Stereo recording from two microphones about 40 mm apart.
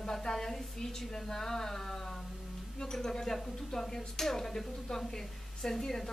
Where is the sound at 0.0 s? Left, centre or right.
Centre.